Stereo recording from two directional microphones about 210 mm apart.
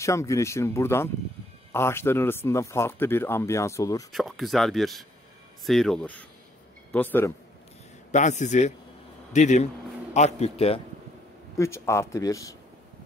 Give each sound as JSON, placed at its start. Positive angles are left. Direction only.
{"t": 0.0, "sound": "speech", "side_deg": 15}
{"t": 4.1, "sound": "speech", "side_deg": 0}
{"t": 8.1, "sound": "a man's voice", "side_deg": 35}
{"t": 11.5, "sound": "speech", "side_deg": 15}